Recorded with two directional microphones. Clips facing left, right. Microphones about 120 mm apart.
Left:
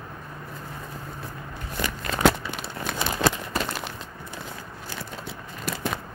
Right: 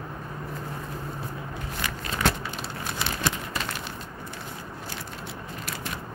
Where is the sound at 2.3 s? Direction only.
70° left (ahead or behind).